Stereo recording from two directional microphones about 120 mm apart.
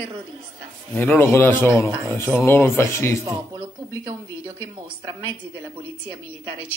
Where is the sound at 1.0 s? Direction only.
15° left (ahead or behind).